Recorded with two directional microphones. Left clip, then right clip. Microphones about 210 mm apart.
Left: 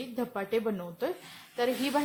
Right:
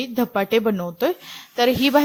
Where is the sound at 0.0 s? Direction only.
35° right (ahead or behind).